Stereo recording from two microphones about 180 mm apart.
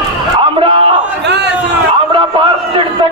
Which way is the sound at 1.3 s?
70° right (ahead or behind).